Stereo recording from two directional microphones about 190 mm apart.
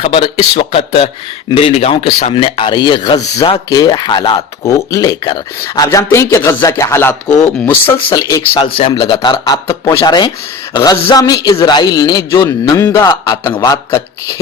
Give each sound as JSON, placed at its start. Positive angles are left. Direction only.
{"t": 0.0, "sound": "a man's voice", "side_deg": 30}